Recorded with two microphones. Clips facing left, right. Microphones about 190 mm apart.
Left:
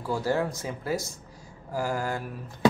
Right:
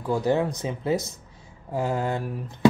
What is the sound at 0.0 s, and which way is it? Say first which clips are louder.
Speech: right 4 dB; 20° right (ahead or behind).